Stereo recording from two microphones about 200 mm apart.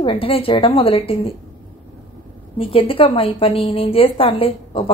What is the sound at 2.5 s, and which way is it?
A woman's voice, 25° left (ahead or behind).